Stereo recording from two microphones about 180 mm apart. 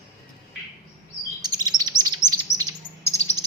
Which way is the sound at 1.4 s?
20° right (ahead or behind).